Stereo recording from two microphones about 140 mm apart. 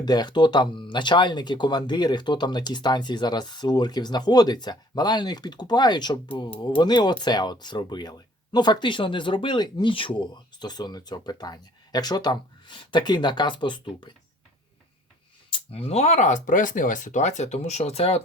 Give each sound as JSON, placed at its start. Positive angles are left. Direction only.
{"t": 0.0, "sound": "speech", "side_deg": 30}
{"t": 15.4, "sound": "speech", "side_deg": 40}